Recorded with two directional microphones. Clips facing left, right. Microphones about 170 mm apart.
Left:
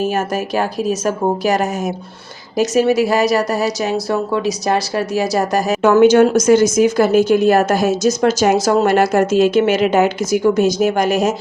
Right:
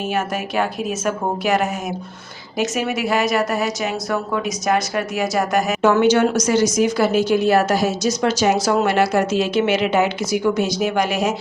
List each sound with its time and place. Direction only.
0.1 s a woman's voice: 40° left (ahead or behind)